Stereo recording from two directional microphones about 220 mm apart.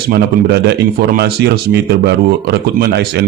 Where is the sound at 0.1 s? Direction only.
50° right (ahead or behind).